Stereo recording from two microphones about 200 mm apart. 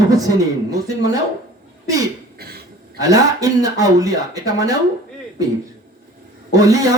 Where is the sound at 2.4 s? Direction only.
50° right (ahead or behind).